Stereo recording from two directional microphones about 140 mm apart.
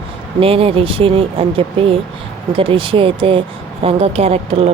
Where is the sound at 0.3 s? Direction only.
45° right (ahead or behind).